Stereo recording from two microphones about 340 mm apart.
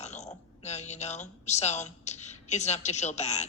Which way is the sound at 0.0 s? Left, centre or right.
Centre.